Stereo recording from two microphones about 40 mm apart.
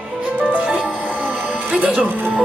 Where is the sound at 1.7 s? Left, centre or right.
Right.